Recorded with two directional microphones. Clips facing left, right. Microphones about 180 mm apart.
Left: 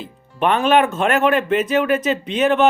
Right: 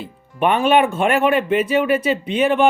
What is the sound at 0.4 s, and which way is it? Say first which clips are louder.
Speech: even; 10° right (ahead or behind).